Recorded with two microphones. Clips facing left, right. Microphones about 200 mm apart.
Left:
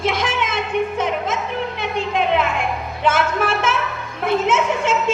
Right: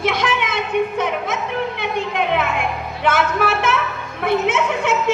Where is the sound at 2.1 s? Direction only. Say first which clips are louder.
Left 3 dB; 60° right (ahead or behind).